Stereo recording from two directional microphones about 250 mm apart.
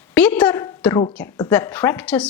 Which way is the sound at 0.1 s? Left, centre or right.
Centre.